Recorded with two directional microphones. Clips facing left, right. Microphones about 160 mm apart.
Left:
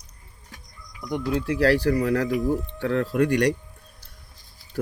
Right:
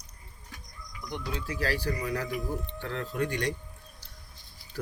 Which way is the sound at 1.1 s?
60° left (ahead or behind).